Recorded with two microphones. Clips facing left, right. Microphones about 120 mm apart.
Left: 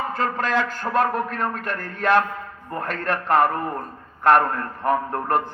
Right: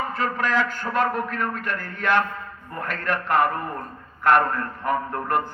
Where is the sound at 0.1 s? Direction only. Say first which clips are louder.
Left 1 dB; 35° left (ahead or behind).